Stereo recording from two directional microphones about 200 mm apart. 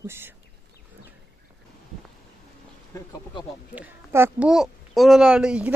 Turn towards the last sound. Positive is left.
turn(degrees=-5)  # may be behind; listen again after turning